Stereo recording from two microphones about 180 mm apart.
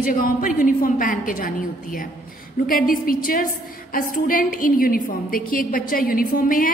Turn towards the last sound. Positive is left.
turn(degrees=50)  # may be behind; listen again after turning